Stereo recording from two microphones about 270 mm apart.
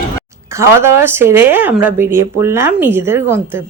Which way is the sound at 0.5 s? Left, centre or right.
Centre.